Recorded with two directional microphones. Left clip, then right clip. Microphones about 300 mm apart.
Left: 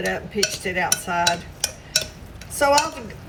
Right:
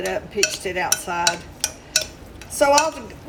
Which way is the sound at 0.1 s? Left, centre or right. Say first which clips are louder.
Right 2 dB; centre.